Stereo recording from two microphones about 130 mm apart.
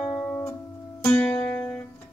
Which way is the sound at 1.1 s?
15° left (ahead or behind).